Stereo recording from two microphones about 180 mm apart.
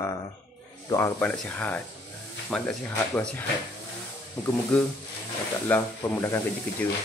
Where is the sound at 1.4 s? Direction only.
5° left (ahead or behind).